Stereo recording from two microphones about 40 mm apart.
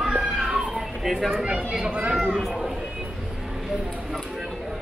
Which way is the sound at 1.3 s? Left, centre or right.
Right.